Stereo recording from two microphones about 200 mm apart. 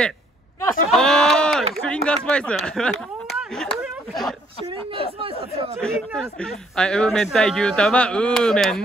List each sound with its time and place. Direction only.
0.9 s speech: 5° left (ahead or behind)
5.0 s speech: 30° right (ahead or behind)
5.8 s speech: 5° left (ahead or behind)